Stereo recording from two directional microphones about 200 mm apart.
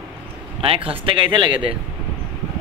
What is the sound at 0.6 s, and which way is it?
Speech, 30° right (ahead or behind).